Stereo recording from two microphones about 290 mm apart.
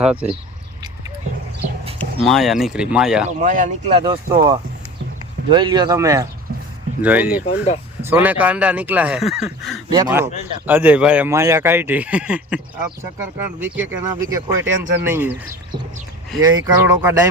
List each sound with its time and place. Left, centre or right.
0.0 s speech: centre
1.8 s clip-clop: centre
2.2 s speech: centre
3.2 s speech: right; by 15.3 s centre
16.4 s speech: centre